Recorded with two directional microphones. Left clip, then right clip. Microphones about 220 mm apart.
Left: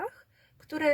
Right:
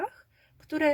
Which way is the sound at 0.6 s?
15° left (ahead or behind).